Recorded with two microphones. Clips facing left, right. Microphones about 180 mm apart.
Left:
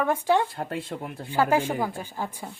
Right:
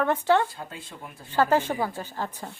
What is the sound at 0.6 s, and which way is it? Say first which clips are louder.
Speech: left 8 dB; 60° left (ahead or behind).